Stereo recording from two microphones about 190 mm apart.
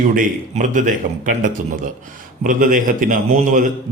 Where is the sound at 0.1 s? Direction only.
45° right (ahead or behind).